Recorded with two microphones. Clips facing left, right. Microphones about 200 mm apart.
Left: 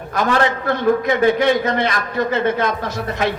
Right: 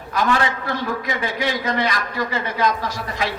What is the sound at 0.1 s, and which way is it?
A man's voice, 45° left (ahead or behind).